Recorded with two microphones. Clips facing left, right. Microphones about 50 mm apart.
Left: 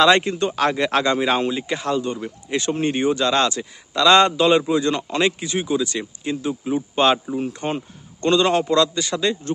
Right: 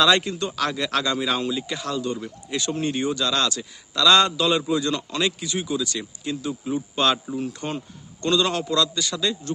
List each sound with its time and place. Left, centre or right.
0.0 s a man's voice: left